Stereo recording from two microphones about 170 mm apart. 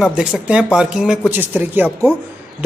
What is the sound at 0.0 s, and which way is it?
Speech, 5° right (ahead or behind).